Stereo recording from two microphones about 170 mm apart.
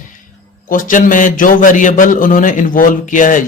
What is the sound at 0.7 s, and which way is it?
A man's voice, 50° left (ahead or behind).